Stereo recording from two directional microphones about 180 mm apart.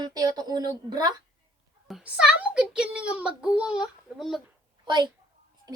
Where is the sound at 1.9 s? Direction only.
5° right (ahead or behind).